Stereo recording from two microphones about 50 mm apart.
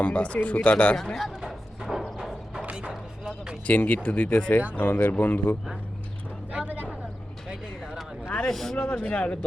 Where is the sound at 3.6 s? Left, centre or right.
Left.